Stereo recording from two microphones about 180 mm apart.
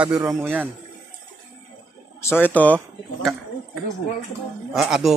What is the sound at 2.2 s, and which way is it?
Speech, 10° left (ahead or behind).